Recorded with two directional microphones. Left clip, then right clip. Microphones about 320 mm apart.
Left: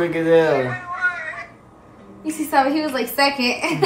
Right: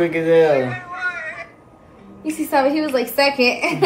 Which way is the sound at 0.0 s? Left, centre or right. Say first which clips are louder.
Right 1 dB; centre.